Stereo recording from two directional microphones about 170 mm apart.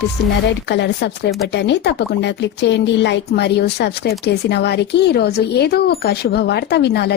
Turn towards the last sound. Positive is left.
turn(degrees=80)